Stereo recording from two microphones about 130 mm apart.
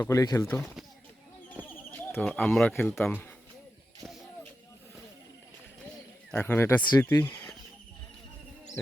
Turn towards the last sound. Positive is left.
turn(degrees=15)  # may be behind; listen again after turning